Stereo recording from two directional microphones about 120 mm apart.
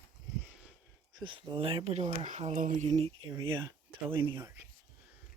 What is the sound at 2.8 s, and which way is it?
Speech, 55° right (ahead or behind).